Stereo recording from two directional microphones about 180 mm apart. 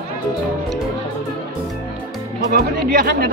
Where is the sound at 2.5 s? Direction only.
55° right (ahead or behind).